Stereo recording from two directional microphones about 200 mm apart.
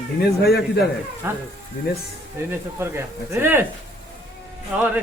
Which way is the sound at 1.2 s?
10° right (ahead or behind).